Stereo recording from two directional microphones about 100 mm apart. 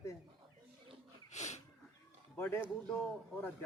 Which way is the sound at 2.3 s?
20° left (ahead or behind).